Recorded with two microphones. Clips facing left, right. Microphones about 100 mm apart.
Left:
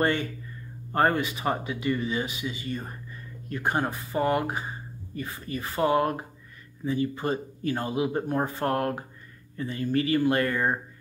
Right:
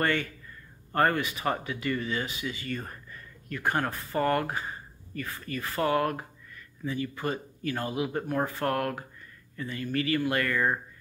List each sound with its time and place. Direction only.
0.0 s speech: 25° left (ahead or behind)